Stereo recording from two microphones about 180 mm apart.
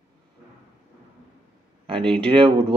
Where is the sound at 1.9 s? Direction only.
30° right (ahead or behind).